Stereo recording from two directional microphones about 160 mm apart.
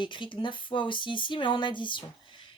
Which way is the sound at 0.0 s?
30° left (ahead or behind).